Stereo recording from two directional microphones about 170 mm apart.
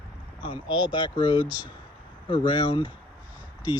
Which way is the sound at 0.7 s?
10° right (ahead or behind).